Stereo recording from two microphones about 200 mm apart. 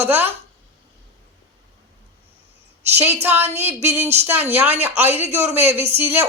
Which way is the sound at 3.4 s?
35° right (ahead or behind).